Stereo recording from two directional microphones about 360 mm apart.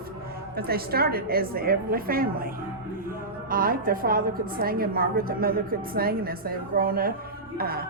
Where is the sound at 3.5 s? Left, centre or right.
Right.